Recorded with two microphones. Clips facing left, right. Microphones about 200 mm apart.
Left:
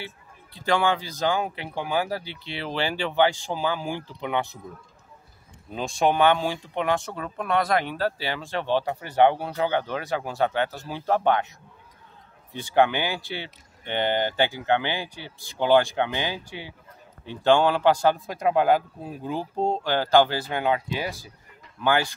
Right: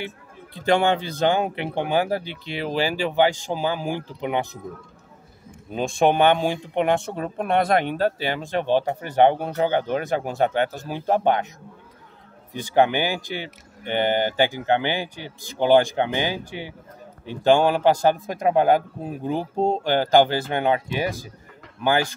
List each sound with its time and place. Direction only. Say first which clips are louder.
0.7 s speech: right 4 dB; 25° right (ahead or behind)
0.9 s speech: right 6 dB; 55° right (ahead or behind)
1.2 s speech: right 4 dB; 25° right (ahead or behind)
5.7 s speech: right 4 dB; 20° right (ahead or behind)
8.0 s speech: right 4 dB; 15° right (ahead or behind)
12.7 s speech: right 2 dB; 15° right (ahead or behind)